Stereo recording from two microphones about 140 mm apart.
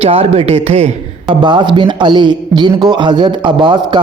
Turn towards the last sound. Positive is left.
turn(degrees=-35)  # may be behind; listen again after turning